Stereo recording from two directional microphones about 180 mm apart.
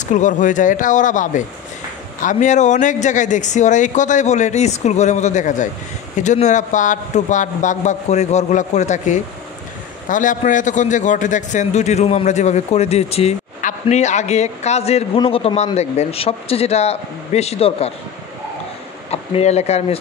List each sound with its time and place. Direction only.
0.0 s a man's voice: 45° left (ahead or behind)
19.0 s speech: 35° left (ahead or behind)